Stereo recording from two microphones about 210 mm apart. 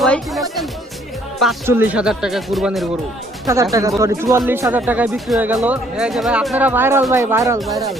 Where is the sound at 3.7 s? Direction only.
15° right (ahead or behind).